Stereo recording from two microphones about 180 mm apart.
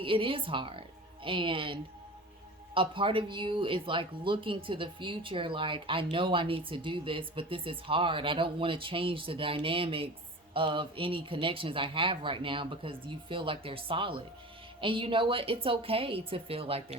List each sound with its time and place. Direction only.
0.0 s a woman's voice: 30° right (ahead or behind)